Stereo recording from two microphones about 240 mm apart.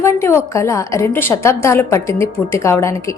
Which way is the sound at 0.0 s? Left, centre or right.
Centre.